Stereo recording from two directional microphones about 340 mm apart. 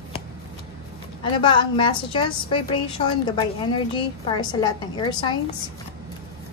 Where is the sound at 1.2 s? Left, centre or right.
Centre.